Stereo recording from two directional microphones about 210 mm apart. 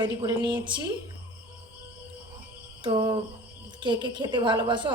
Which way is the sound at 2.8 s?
20° right (ahead or behind).